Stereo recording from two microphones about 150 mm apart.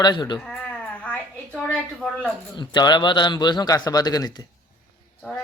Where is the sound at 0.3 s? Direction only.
5° left (ahead or behind).